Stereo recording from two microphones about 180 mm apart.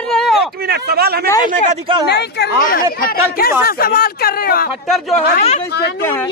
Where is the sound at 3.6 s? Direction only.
55° left (ahead or behind).